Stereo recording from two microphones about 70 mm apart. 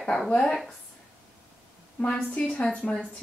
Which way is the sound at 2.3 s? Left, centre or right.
Centre.